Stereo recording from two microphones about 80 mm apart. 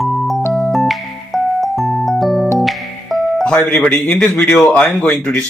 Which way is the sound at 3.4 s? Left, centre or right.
Centre.